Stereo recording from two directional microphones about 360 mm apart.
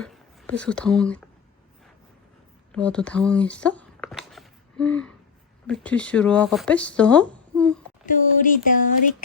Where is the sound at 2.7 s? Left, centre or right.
Centre.